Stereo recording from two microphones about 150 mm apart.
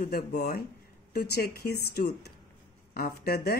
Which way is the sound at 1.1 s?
90° left.